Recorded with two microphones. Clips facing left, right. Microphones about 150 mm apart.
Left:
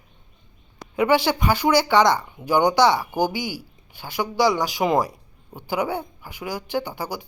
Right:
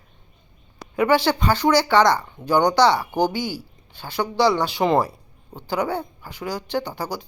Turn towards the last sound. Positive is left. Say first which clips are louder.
# right 1 dB
turn(degrees=10)  # may be behind; listen again after turning